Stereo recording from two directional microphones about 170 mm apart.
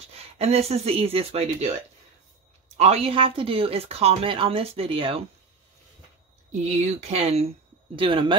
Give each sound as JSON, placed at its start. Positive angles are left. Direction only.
{"t": 0.1, "sound": "speech", "side_deg": -35}
{"t": 2.8, "sound": "speech", "side_deg": -35}
{"t": 7.0, "sound": "speech", "side_deg": -40}